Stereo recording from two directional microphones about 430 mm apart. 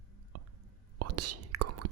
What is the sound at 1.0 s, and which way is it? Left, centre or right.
Whispering, right.